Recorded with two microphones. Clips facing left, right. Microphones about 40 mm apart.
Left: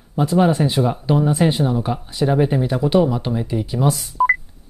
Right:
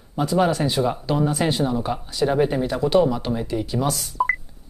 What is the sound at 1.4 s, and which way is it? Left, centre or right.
Speech, centre.